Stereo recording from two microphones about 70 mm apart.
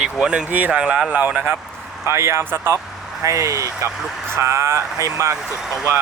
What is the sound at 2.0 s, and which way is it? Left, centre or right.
Speech, right.